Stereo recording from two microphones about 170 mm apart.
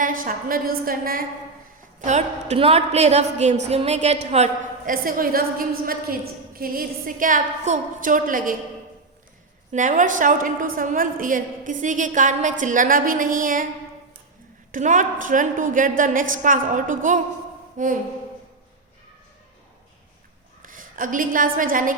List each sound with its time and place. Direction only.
0.0 s a woman's voice: 55° right (ahead or behind)
2.0 s a woman's voice: 45° right (ahead or behind)
4.9 s a woman's voice: 55° right (ahead or behind)
9.7 s a woman's voice: 50° right (ahead or behind)
14.7 s a woman's voice: 45° right (ahead or behind)
20.6 s a woman's voice: 55° right (ahead or behind)